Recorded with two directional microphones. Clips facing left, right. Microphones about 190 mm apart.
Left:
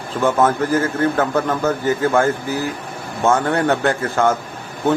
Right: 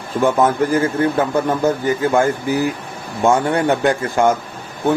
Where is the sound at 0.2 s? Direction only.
15° right (ahead or behind).